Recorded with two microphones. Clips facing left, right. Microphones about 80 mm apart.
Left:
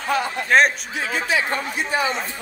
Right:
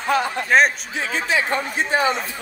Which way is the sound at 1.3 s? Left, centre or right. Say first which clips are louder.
Right 3 dB; right.